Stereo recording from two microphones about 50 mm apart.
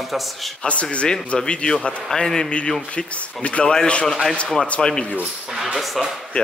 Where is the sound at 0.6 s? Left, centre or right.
Left.